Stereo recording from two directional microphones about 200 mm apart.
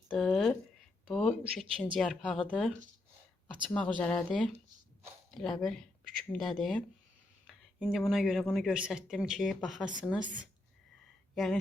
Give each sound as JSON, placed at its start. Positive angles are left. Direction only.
{"t": 0.1, "sound": "a sound", "side_deg": 5}
{"t": 1.1, "sound": "speech", "side_deg": 0}
{"t": 3.8, "sound": "speech", "side_deg": 5}